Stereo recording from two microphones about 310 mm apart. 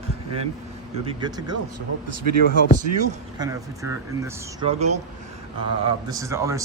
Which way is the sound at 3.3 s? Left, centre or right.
Centre.